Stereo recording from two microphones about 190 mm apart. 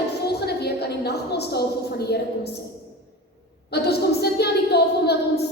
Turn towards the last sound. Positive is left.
turn(degrees=60)  # may be behind; listen again after turning